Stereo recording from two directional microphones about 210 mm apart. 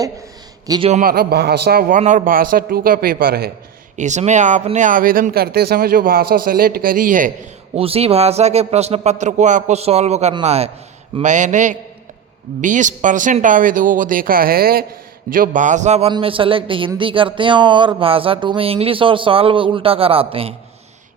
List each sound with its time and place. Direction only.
0.7 s speech: 30° right (ahead or behind); by 3.5 s 45° right (ahead or behind)
3.9 s speech: 35° right (ahead or behind)
7.8 s a man's voice: 30° right (ahead or behind)